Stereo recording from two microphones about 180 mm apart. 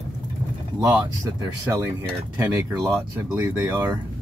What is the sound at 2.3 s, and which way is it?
Speech, 10° right (ahead or behind).